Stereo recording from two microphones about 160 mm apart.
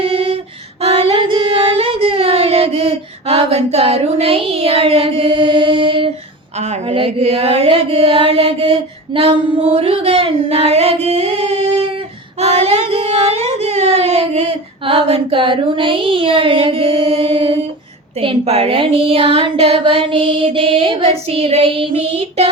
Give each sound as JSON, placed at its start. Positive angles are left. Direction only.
{"t": 0.0, "sound": "female singing", "side_deg": -35}
{"t": 0.8, "sound": "singing", "side_deg": -40}
{"t": 6.6, "sound": "a sound", "side_deg": -40}